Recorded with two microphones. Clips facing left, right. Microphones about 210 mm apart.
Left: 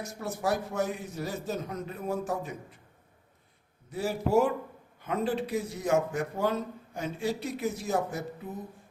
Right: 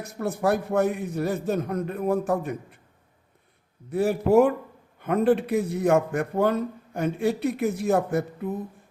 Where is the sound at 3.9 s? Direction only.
60° right (ahead or behind).